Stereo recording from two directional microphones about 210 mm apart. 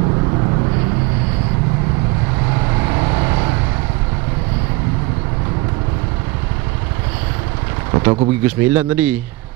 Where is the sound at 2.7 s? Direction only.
20° right (ahead or behind).